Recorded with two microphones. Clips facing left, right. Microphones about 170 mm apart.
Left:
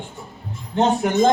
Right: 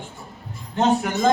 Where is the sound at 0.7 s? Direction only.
25° left (ahead or behind).